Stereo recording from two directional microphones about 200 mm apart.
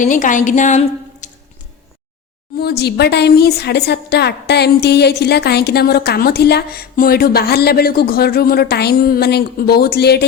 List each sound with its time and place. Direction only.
0.0 s a woman's voice: 40° left (ahead or behind)
2.6 s a woman's voice: 50° left (ahead or behind)